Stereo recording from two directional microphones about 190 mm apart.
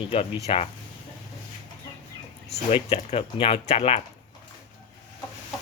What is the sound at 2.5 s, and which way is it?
Speech, 35° left (ahead or behind).